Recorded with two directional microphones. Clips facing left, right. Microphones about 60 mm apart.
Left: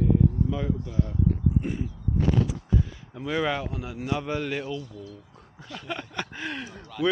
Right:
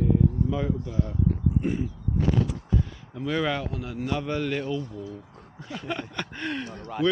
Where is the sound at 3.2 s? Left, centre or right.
Centre.